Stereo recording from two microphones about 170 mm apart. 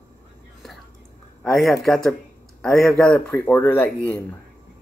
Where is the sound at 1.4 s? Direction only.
Centre (ahead or behind).